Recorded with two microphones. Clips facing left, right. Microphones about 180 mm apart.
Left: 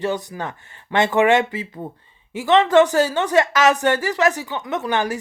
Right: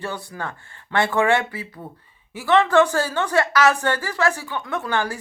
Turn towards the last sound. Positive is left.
turn(degrees=20)  # may be behind; listen again after turning